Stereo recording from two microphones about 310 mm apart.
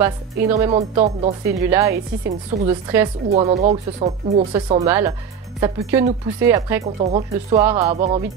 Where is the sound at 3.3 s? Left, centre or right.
Right.